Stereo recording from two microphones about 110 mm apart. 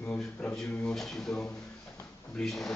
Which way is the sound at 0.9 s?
5° left (ahead or behind).